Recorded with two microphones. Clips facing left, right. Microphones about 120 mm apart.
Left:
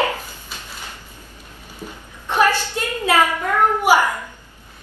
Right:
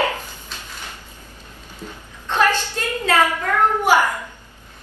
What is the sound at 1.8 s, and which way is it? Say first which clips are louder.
Speech: left 1 dB; 10° left (ahead or behind).